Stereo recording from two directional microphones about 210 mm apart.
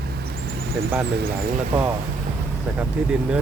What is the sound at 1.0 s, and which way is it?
Speech, 50° right (ahead or behind).